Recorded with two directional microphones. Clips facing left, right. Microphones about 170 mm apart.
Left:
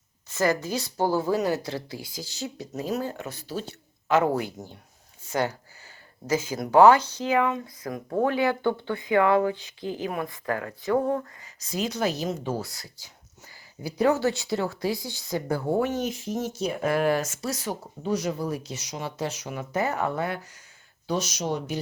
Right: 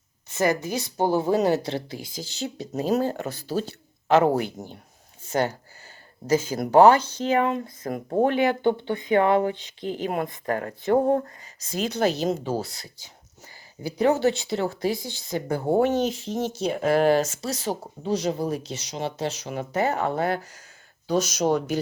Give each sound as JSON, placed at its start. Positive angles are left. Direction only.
{"t": 0.3, "sound": "a woman's voice", "side_deg": -20}
{"t": 10.9, "sound": "speech", "side_deg": -40}
{"t": 11.6, "sound": "a woman's voice", "side_deg": -25}
{"t": 21.2, "sound": "speech", "side_deg": -45}